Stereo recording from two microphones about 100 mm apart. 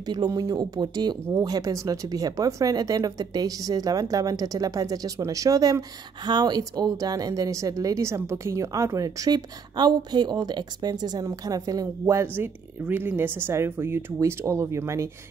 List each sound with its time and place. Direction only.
0.0 s speech: 45° right (ahead or behind); by 15.0 s 30° right (ahead or behind)